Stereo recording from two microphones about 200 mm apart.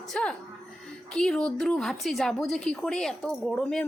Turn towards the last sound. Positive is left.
turn(degrees=5)  # may be behind; listen again after turning